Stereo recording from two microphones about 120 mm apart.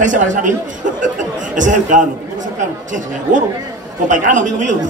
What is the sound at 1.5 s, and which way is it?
A man's voice, 90° right.